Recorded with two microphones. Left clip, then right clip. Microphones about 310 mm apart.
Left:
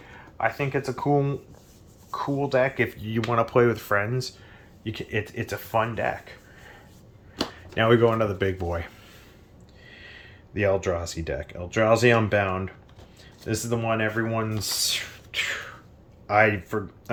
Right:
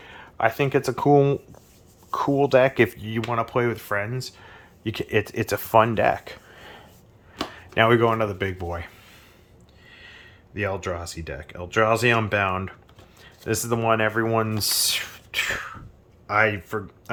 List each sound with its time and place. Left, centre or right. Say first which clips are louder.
0.0 s speech: right 4 dB; right
3.0 s speech: left 1 dB; centre
4.4 s speech: right 4 dB; centre
7.5 s speech: right 2 dB; centre
9.9 s speech: even; centre
16.2 s speech: left 1 dB; centre